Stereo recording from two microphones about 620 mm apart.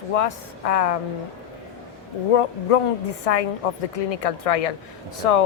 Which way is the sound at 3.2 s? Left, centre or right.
Left.